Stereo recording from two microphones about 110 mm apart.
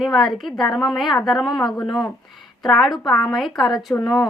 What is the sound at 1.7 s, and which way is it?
Speech, 40° left (ahead or behind).